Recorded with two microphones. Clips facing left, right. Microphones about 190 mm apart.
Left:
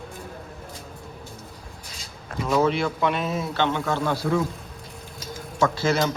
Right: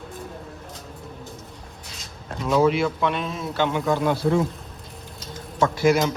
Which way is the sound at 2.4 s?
Centre (ahead or behind).